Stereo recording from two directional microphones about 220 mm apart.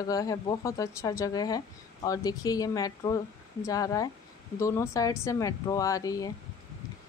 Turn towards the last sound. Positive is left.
turn(degrees=15)  # may be behind; listen again after turning